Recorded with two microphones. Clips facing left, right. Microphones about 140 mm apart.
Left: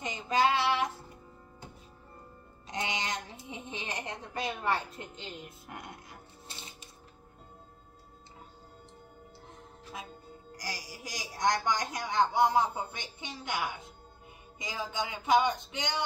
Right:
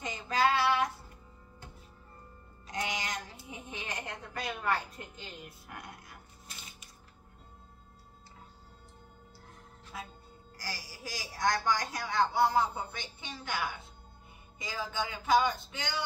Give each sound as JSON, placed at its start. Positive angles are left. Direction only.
{"t": 0.0, "sound": "child singing", "side_deg": 20}
{"t": 2.7, "sound": "a sound", "side_deg": 20}
{"t": 10.5, "sound": "music", "side_deg": 15}
{"t": 14.6, "sound": "a man's voice", "side_deg": 15}